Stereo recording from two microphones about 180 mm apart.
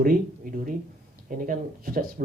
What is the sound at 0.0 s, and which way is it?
Speech, 50° right (ahead or behind).